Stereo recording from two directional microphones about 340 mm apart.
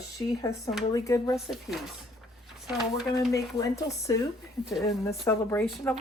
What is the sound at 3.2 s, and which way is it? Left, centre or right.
A woman's voice, centre.